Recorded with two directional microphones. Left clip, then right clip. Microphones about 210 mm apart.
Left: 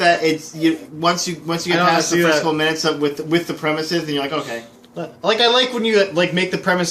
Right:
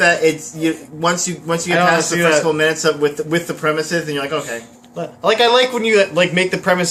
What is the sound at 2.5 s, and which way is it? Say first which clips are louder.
Speech: right 3 dB; 10° left (ahead or behind).